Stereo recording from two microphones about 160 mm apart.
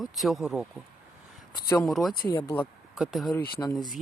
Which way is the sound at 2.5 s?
35° left (ahead or behind).